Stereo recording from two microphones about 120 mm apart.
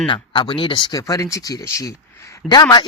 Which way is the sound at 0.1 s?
40° left (ahead or behind).